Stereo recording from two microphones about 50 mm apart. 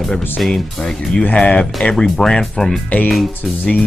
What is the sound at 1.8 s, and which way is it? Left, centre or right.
Speech, centre.